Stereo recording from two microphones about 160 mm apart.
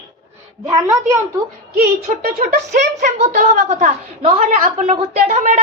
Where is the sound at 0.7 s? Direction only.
20° right (ahead or behind).